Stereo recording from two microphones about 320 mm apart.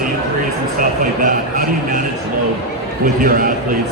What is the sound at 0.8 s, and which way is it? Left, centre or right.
A man's voice, right.